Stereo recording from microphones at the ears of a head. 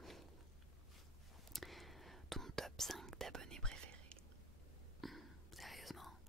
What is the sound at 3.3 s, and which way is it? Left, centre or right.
Whispering, right.